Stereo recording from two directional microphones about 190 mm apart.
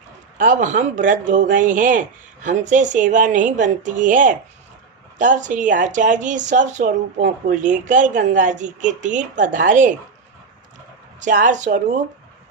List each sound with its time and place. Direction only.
0.3 s speech: 40° right (ahead or behind)
11.2 s speech: 40° right (ahead or behind)